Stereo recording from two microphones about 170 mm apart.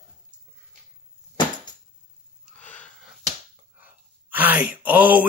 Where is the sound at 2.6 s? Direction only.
10° left (ahead or behind).